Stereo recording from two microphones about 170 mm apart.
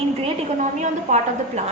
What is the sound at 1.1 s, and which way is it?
Speech, 45° right (ahead or behind).